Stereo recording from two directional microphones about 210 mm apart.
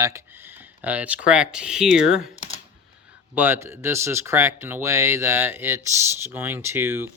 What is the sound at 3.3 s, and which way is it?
Speech, 10° right (ahead or behind).